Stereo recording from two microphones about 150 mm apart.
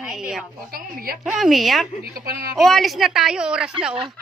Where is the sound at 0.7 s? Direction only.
85° right.